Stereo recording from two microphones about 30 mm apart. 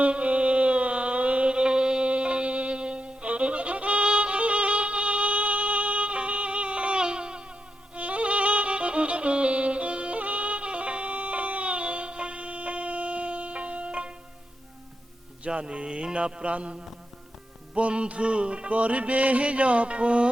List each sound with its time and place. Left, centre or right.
0.0 s music: right
1.5 s mantra: right
2.0 s music: right
7.9 s music: right
10.2 s music: right
15.4 s music: right
16.1 s mantra: right
17.7 s music: right
18.7 s music: right